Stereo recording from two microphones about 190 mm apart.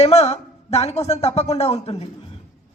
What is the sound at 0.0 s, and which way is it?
Speech, 35° left (ahead or behind).